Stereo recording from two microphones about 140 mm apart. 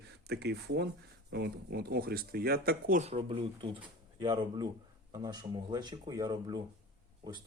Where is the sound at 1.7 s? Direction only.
90° right.